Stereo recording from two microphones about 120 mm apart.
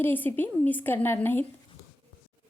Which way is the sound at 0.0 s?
15° left (ahead or behind).